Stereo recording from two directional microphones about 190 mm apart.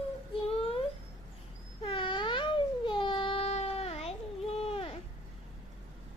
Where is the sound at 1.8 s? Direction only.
25° left (ahead or behind).